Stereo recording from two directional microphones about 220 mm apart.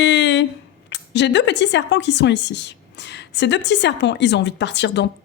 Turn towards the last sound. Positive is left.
turn(degrees=50)  # may be behind; listen again after turning